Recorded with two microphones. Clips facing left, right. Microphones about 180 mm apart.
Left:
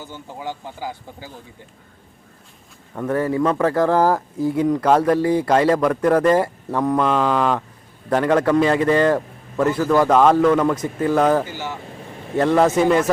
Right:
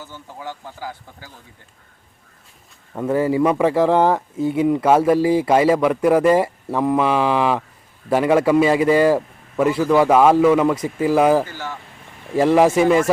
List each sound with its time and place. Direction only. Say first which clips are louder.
0.0 s speech: left 2 dB; 20° left (ahead or behind)
2.9 s a man's voice: right 2 dB; 5° right (ahead or behind)